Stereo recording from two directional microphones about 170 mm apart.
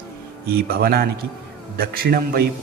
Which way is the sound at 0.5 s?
65° right (ahead or behind).